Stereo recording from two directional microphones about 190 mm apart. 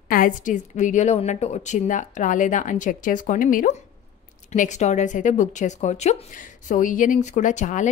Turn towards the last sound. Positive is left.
turn(degrees=40)  # may be behind; listen again after turning